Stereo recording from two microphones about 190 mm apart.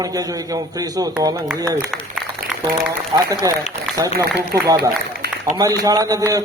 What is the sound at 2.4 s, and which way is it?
Music, 50° right (ahead or behind).